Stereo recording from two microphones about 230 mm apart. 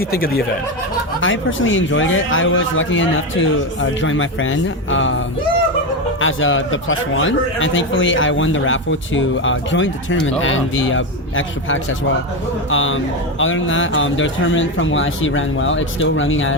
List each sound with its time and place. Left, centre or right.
0.0 s speech: left
1.2 s a man's voice: left